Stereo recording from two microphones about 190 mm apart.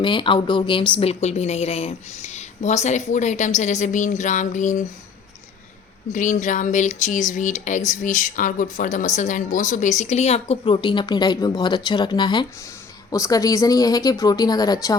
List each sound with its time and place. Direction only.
0.0 s speech: 25° left (ahead or behind)
6.1 s speech: 40° left (ahead or behind); by 14.9 s 20° left (ahead or behind)